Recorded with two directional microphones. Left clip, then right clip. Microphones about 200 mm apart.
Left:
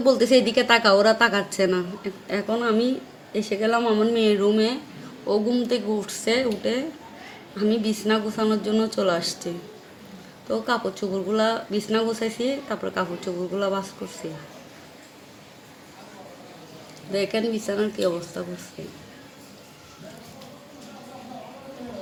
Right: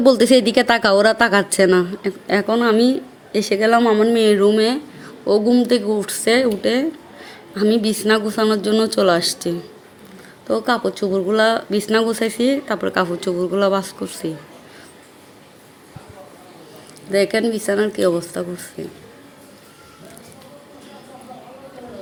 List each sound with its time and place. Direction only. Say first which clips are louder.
0.0 s speech: right 5 dB; 45° right (ahead or behind)
10.5 s speech: right 6 dB; 45° right (ahead or behind)
17.1 s speech: right 7 dB; 45° right (ahead or behind)